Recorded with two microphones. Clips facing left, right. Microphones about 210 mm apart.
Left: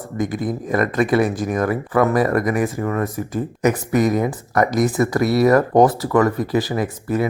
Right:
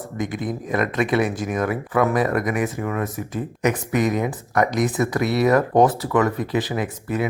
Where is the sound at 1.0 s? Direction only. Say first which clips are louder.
Left 4 dB; centre (ahead or behind).